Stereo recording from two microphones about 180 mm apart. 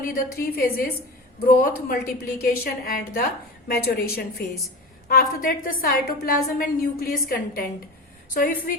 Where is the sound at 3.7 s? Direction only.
60° left (ahead or behind).